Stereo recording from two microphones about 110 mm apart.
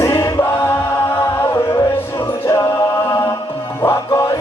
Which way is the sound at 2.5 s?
30° left (ahead or behind).